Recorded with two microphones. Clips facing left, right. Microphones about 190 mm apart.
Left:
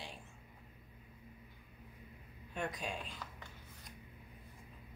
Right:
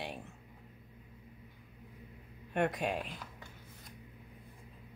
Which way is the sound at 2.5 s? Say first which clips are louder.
Right 9 dB; 65° right (ahead or behind).